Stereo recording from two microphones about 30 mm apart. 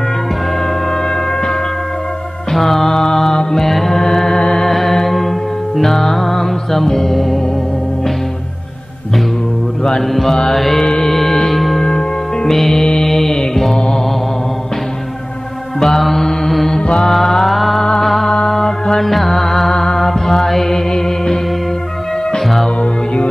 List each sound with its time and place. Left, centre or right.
2.5 s mantra: centre
4.6 s music: centre
9.8 s music: centre
15.8 s mantra: centre
17.0 s music: centre
22.8 s music: left